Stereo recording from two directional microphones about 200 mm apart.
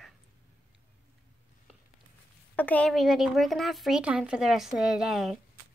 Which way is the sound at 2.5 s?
5° left (ahead or behind).